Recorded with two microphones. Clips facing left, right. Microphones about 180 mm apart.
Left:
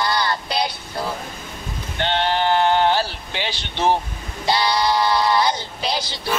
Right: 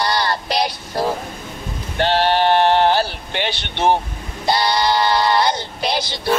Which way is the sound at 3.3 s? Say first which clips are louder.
Right 4 dB; 60° right (ahead or behind).